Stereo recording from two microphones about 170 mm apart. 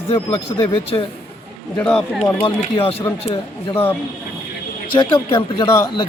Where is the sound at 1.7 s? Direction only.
5° left (ahead or behind).